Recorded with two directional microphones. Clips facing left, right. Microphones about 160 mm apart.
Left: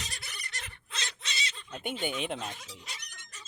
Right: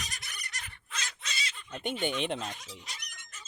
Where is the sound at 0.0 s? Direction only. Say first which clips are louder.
Even; 30° left (ahead or behind).